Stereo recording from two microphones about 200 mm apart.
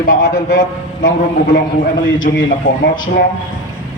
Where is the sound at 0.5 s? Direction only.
70° left (ahead or behind).